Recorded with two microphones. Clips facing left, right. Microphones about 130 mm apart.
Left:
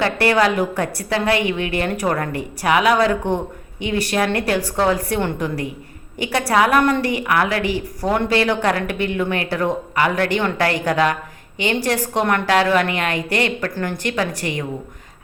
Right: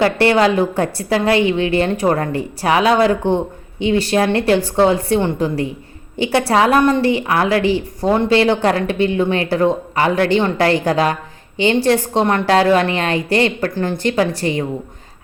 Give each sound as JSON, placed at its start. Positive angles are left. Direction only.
{"t": 0.0, "sound": "a woman's voice", "side_deg": -30}